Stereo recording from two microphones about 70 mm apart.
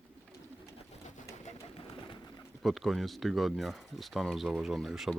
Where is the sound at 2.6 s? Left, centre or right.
Centre.